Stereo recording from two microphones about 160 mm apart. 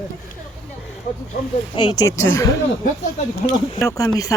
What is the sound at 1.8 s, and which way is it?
A woman's voice, 20° left (ahead or behind).